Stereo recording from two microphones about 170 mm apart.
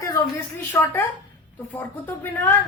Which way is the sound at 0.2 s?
15° left (ahead or behind).